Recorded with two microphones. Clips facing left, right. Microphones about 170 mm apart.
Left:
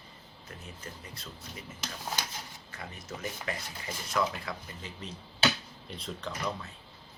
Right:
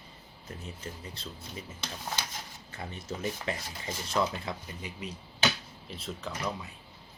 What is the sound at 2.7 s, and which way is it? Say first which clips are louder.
Speech: right 4 dB; 25° right (ahead or behind).